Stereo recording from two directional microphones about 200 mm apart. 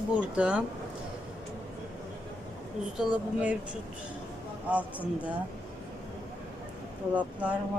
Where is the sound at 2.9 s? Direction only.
5° right (ahead or behind).